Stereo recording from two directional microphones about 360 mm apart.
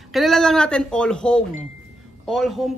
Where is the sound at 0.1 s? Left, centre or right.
Centre.